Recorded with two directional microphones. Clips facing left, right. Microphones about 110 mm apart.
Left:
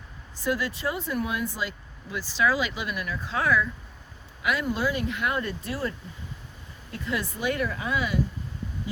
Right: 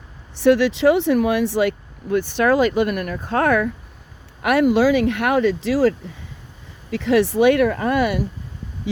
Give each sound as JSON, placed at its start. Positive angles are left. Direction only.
{"t": 0.3, "sound": "speech", "side_deg": -75}
{"t": 4.4, "sound": "speech", "side_deg": -70}
{"t": 6.9, "sound": "speech", "side_deg": -80}